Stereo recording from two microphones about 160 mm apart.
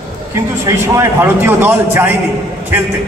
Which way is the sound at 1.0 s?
15° right (ahead or behind).